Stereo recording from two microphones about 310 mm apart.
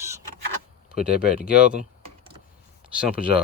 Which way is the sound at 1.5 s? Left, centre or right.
Centre.